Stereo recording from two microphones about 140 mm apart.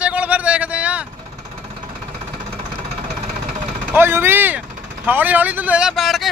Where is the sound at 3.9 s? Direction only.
15° right (ahead or behind); by 6.2 s centre (ahead or behind).